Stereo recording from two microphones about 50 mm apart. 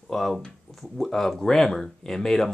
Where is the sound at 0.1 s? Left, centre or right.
Centre.